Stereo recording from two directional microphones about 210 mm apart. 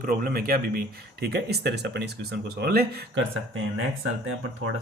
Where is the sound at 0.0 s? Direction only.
40° right (ahead or behind).